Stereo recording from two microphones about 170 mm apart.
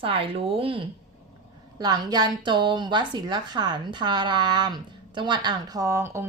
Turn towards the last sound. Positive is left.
turn(degrees=-15)  # may be behind; listen again after turning